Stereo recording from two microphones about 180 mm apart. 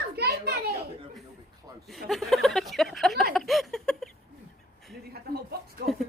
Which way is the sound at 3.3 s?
Centre (ahead or behind).